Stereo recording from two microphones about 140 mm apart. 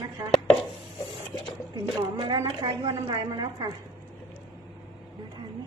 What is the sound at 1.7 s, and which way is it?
A woman's voice, 30° right (ahead or behind).